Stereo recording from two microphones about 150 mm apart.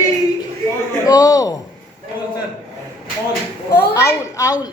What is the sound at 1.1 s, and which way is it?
Speech, 25° left (ahead or behind).